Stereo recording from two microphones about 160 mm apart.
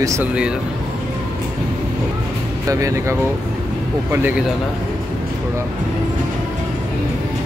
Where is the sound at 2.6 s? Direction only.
20° right (ahead or behind).